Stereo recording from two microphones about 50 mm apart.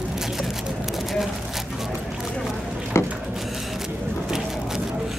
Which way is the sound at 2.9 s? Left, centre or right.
Left.